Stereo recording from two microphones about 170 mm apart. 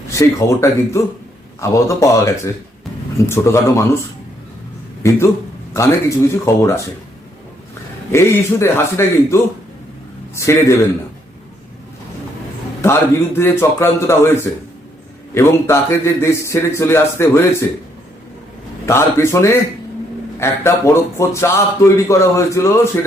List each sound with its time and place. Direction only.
0.1 s a man's voice: 20° left (ahead or behind)
5.0 s a man's voice: 15° left (ahead or behind)
8.1 s a man's voice: 15° left (ahead or behind)
12.8 s a man's voice: 15° left (ahead or behind)
15.4 s a man's voice: 15° left (ahead or behind)
18.9 s a man's voice: 15° left (ahead or behind)